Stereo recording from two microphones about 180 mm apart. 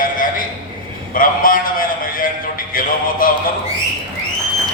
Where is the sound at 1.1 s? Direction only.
50° left (ahead or behind).